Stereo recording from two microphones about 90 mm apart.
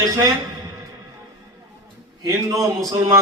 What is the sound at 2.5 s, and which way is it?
Speech, 35° right (ahead or behind).